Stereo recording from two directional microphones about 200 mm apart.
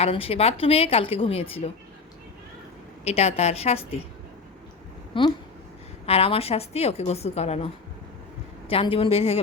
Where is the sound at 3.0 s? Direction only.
30° left (ahead or behind).